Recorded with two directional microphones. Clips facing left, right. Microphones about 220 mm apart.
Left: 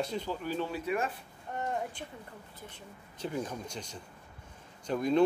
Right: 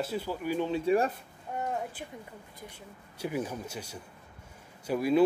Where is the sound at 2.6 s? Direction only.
10° right (ahead or behind).